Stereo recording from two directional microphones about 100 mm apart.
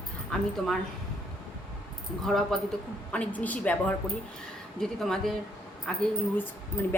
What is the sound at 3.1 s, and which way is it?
Speech, 15° left (ahead or behind).